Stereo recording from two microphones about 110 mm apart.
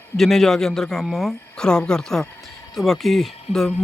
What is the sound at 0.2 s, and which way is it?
Speech, 5° left (ahead or behind).